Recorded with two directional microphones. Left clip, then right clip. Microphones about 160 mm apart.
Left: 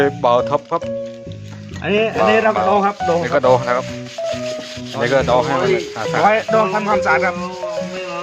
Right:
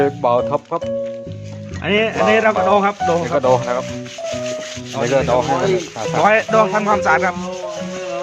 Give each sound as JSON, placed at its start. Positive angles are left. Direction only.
{"t": 0.0, "sound": "speech", "side_deg": -5}
{"t": 1.8, "sound": "speech", "side_deg": -10}
{"t": 3.2, "sound": "speech", "side_deg": 0}
{"t": 4.9, "sound": "speech", "side_deg": -5}
{"t": 6.2, "sound": "speech", "side_deg": -30}